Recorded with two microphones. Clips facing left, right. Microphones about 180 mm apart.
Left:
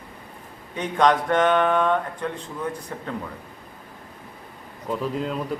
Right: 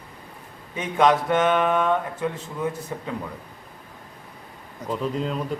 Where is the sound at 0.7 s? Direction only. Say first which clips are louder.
Even; 5° right (ahead or behind).